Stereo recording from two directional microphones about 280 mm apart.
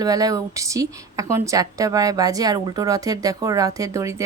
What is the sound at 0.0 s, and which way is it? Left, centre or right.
A woman's voice, centre.